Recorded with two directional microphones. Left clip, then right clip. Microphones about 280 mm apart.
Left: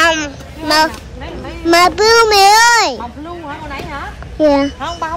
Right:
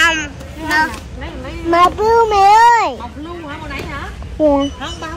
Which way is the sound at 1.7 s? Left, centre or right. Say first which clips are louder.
Left 2 dB; right.